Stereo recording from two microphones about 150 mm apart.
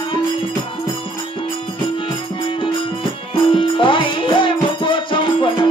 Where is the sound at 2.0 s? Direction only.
35° left (ahead or behind).